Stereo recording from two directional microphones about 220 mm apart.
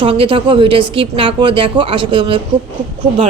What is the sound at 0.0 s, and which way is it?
Speech, 25° right (ahead or behind).